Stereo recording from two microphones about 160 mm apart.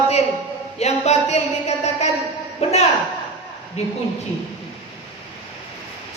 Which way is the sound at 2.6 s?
40° left (ahead or behind).